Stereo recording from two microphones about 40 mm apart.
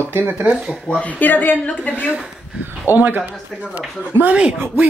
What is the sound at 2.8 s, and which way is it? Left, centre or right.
Speech, right.